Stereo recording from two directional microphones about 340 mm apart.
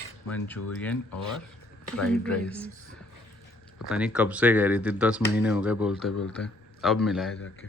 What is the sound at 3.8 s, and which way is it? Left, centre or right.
A man's voice, centre.